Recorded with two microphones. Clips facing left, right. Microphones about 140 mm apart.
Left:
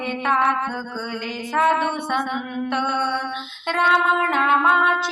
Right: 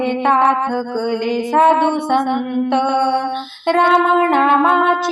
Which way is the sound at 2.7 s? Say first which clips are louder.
Right 8 dB; 55° right (ahead or behind).